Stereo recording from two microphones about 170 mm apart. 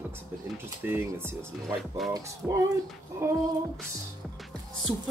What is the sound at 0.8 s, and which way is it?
Speech, 15° right (ahead or behind).